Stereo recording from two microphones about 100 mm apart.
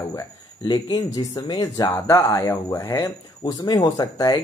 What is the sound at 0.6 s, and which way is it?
Speech, 40° left (ahead or behind).